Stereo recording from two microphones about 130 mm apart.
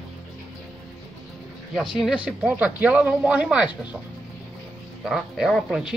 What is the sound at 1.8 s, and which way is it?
Speech, 5° right (ahead or behind).